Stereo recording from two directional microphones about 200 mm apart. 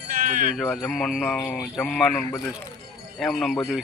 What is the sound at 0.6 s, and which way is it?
Speech, centre (ahead or behind).